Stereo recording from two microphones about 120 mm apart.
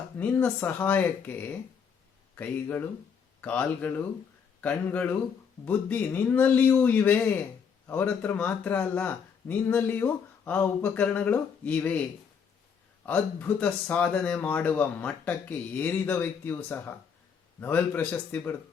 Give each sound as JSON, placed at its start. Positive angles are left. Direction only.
{"t": 0.2, "sound": "speech", "side_deg": 15}
{"t": 13.1, "sound": "speech", "side_deg": 10}